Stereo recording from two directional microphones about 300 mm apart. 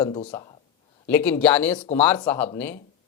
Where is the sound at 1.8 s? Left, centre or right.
Left.